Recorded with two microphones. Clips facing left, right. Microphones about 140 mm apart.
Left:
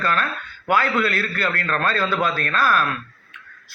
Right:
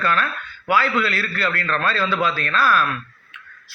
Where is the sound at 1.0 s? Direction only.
50° left (ahead or behind).